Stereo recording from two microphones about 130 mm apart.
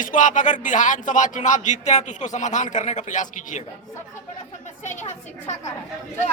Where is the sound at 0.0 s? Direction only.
85° left.